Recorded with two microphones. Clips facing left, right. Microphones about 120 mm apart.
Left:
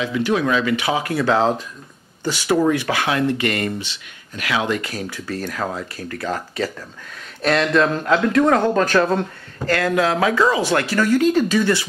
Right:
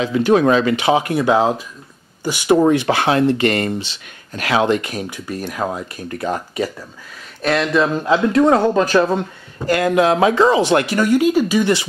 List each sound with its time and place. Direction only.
0.0 s speech: 40° right (ahead or behind); by 2.6 s 15° right (ahead or behind)
2.6 s speech: 25° right (ahead or behind)
4.6 s speech: 25° right (ahead or behind)
7.4 s speech: centre (ahead or behind); by 11.9 s 20° right (ahead or behind)